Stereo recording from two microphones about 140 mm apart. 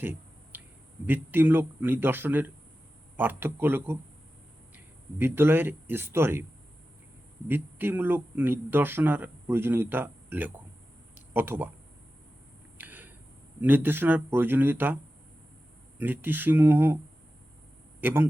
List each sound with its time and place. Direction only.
0.0 s a sound: 15° right (ahead or behind)
1.0 s a man's voice: 15° right (ahead or behind)
7.4 s a man's voice: 15° right (ahead or behind)
12.7 s a sound: 15° right (ahead or behind)
13.6 s a man's voice: 15° right (ahead or behind)
16.0 s a man's voice: 15° right (ahead or behind)
18.0 s a man's voice: 15° right (ahead or behind)